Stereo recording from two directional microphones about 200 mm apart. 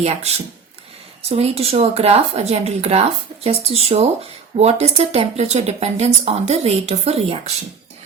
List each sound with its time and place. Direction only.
0.0 s speech: 30° right (ahead or behind)